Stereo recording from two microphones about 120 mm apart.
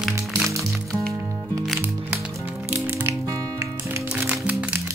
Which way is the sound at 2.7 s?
15° right (ahead or behind).